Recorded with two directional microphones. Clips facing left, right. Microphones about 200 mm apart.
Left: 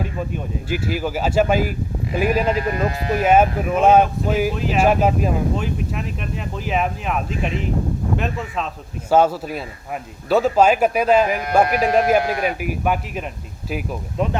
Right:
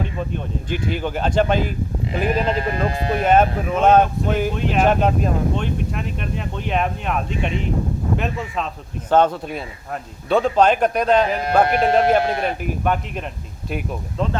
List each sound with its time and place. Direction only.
0.0 s speech: 5° left (ahead or behind)
2.7 s speech: 30° right (ahead or behind)
3.2 s speech: 5° left (ahead or behind)
11.6 s speech: 25° right (ahead or behind)
12.5 s speech: 5° left (ahead or behind)